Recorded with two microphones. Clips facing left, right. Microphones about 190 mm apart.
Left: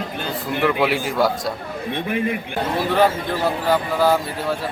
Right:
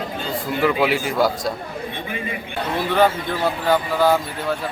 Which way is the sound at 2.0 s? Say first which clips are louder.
Left 6 dB; 65° left (ahead or behind).